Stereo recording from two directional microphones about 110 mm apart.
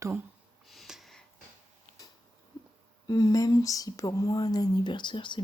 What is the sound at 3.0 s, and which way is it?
Speech, 35° left (ahead or behind).